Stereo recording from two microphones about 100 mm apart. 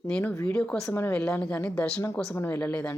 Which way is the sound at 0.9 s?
25° left (ahead or behind).